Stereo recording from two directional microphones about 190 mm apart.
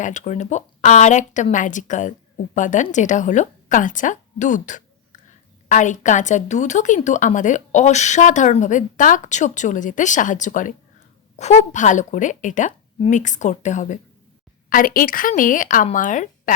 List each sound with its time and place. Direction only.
0.0 s a woman's voice: 40° left (ahead or behind)